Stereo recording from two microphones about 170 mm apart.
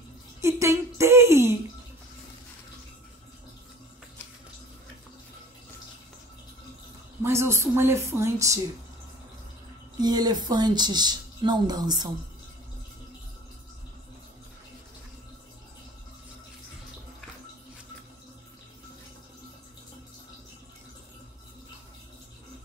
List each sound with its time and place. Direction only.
0.4 s a sound: 15° right (ahead or behind)
7.2 s a woman's voice: 15° right (ahead or behind)
9.9 s speech: 25° right (ahead or behind)